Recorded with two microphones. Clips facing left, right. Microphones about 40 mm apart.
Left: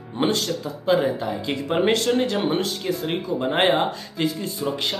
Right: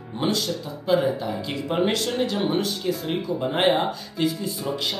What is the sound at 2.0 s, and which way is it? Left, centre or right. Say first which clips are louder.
Speech: left 3 dB; left.